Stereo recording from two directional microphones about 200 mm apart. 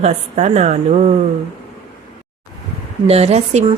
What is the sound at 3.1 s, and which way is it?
Speech, 30° right (ahead or behind).